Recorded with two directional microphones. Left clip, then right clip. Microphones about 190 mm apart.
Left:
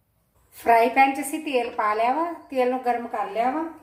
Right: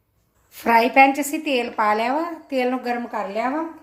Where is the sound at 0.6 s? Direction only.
50° right (ahead or behind).